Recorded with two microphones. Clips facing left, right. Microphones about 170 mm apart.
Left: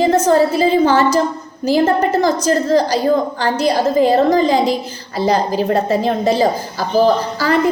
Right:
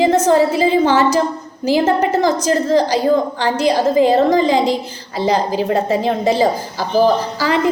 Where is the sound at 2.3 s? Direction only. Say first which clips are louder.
Even; 15° right (ahead or behind).